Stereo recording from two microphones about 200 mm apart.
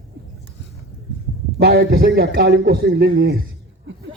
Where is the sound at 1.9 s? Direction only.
50° right (ahead or behind).